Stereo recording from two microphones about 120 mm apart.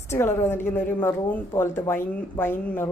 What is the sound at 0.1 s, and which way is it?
Speech, 20° left (ahead or behind).